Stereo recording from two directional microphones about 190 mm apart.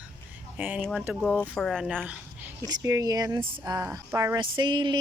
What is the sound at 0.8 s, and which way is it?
Speech, 5° left (ahead or behind).